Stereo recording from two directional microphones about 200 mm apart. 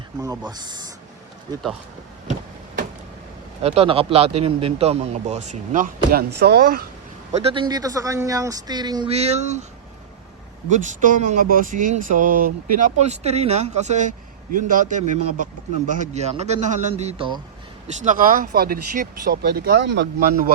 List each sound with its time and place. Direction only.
0.2 s speech: 20° right (ahead or behind)
3.6 s speech: 30° right (ahead or behind); by 6.8 s 50° right (ahead or behind)
7.3 s speech: 25° right (ahead or behind)
10.7 s speech: 40° right (ahead or behind)
18.0 s speech: 40° right (ahead or behind)